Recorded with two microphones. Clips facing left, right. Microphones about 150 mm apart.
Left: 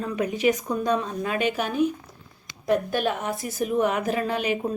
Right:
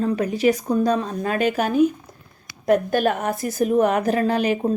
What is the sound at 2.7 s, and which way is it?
Speech, 45° right (ahead or behind).